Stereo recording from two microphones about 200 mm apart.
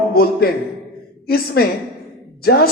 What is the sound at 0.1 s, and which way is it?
Speech, 50° left (ahead or behind).